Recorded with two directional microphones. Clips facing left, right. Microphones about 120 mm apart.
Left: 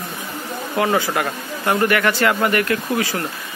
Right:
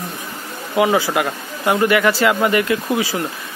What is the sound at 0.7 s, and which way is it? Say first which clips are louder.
Speech: right 3 dB; 15° right (ahead or behind).